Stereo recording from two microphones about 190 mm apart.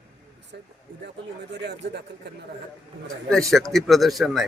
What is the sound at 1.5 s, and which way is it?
Speech, 65° right (ahead or behind).